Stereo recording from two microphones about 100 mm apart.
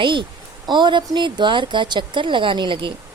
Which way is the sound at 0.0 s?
55° right (ahead or behind).